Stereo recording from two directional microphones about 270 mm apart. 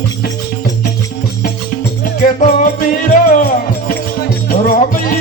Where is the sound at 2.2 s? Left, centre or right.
Left.